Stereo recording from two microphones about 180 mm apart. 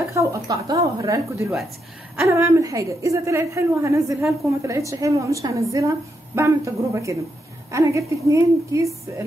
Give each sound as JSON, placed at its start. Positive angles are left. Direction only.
{"t": 0.1, "sound": "a woman's voice", "side_deg": -15}